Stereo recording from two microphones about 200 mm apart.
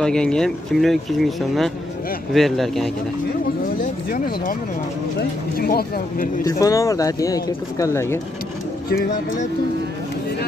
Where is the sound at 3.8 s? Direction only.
45° left (ahead or behind).